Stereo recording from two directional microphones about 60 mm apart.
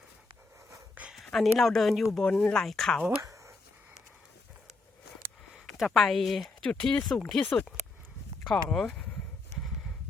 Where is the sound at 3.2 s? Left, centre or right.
Right.